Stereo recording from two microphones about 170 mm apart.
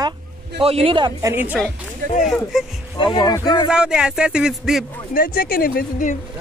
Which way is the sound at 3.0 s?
25° left (ahead or behind).